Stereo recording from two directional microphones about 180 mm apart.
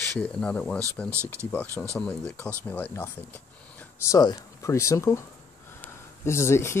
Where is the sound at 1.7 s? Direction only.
15° right (ahead or behind).